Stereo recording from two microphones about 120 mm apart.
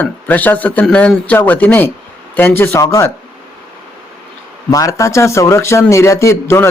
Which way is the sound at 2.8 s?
30° left (ahead or behind).